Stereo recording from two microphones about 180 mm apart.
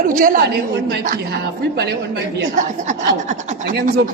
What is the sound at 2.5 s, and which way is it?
Speech, 45° right (ahead or behind).